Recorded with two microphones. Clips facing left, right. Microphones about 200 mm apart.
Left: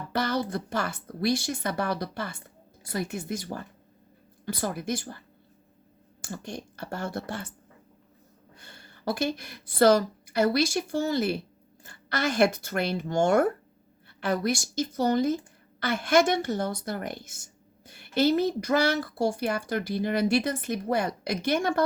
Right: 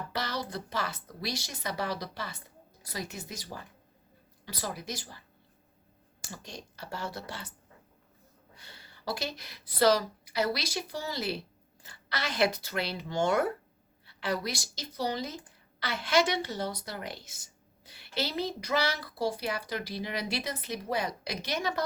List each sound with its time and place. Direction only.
0.1 s speech: 50° left (ahead or behind)
6.2 s speech: 50° left (ahead or behind)
8.5 s a woman's voice: 50° left (ahead or behind)